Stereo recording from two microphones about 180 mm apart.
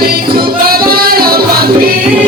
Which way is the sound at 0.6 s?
55° right (ahead or behind).